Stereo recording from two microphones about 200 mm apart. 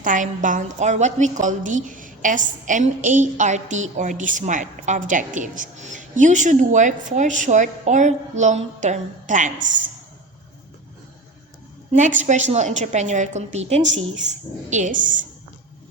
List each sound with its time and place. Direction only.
0.0 s a woman's voice: 40° right (ahead or behind)
11.9 s a woman's voice: 35° right (ahead or behind)